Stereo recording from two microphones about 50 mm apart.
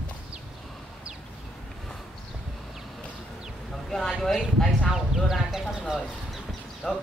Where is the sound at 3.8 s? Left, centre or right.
Centre.